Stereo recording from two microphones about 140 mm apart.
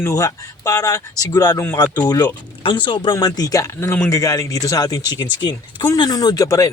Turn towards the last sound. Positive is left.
turn(degrees=25)  # may be behind; listen again after turning